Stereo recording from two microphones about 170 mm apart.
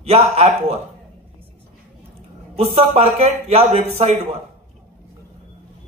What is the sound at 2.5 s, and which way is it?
A man's voice, 35° right (ahead or behind).